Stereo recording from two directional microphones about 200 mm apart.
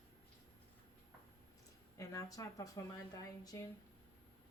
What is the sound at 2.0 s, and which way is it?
Speech, 15° left (ahead or behind).